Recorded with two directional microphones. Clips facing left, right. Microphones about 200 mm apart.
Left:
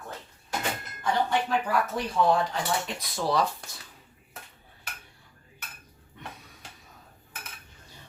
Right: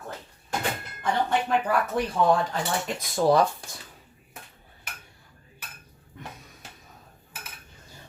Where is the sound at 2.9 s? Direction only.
50° right (ahead or behind).